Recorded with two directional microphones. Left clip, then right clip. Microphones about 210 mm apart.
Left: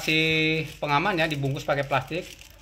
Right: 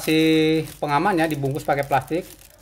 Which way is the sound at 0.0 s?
50° right (ahead or behind).